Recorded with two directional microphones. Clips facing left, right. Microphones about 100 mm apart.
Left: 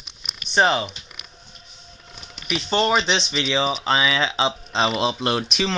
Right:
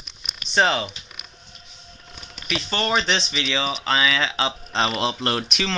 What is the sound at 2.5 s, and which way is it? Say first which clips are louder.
Speech: left 3 dB; 15° left (ahead or behind).